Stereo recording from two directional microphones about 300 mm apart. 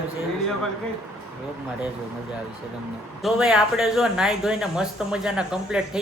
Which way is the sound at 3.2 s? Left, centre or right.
Centre.